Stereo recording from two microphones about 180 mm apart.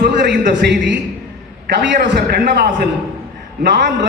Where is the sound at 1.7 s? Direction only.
65° right (ahead or behind).